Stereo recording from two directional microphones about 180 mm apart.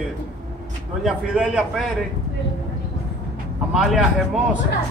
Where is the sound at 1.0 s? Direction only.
5° right (ahead or behind).